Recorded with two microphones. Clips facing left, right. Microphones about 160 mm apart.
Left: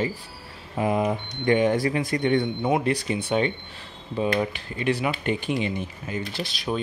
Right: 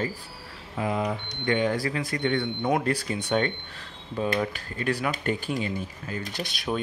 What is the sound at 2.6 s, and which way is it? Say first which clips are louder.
Speech: left 2 dB; 10° left (ahead or behind).